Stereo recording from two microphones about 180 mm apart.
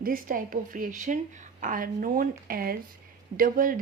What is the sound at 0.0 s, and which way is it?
A woman's voice, 50° right (ahead or behind).